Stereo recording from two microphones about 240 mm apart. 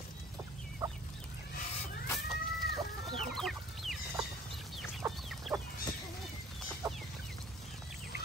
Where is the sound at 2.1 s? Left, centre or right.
Centre.